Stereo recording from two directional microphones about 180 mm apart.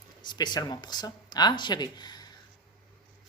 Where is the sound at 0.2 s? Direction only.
25° left (ahead or behind).